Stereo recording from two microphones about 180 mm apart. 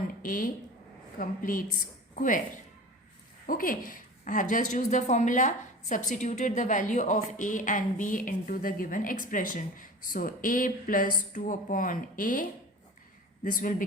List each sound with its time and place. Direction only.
0.2 s a woman's voice: 50° left (ahead or behind)
3.4 s a woman's voice: 50° left (ahead or behind)